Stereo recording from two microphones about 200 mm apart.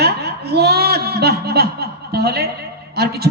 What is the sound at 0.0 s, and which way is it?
Chuckle, 55° right (ahead or behind).